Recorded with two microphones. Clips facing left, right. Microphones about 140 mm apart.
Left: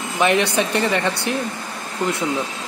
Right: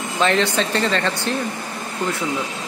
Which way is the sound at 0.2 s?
15° left (ahead or behind).